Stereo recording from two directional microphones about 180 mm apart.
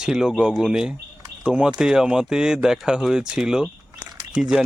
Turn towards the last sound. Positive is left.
turn(degrees=-5)  # may be behind; listen again after turning